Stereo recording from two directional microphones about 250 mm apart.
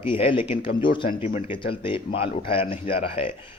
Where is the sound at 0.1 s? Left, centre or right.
Left.